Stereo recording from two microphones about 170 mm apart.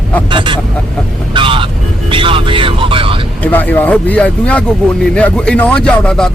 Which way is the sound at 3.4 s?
10° left (ahead or behind).